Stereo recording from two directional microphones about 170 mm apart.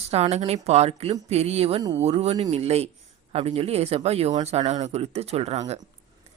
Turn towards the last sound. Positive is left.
turn(degrees=-40)  # may be behind; listen again after turning